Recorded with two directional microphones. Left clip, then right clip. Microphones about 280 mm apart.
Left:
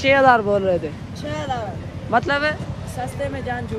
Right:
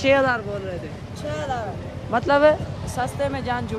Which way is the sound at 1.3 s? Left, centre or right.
Left.